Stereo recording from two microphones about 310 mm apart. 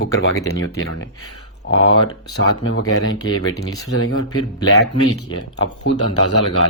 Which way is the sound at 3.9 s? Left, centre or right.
Left.